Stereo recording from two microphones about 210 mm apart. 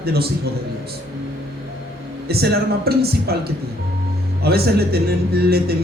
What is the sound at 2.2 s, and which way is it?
A man's voice, 50° right (ahead or behind).